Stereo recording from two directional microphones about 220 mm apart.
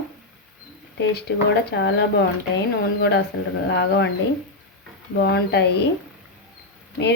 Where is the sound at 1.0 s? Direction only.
45° left (ahead or behind).